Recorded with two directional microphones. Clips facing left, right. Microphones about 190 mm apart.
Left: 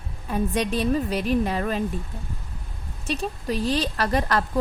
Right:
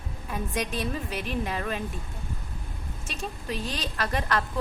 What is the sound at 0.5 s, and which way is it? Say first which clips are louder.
A woman's voice: left 7 dB; 35° left (ahead or behind).